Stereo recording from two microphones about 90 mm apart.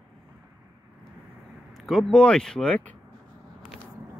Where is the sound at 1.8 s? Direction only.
Centre (ahead or behind).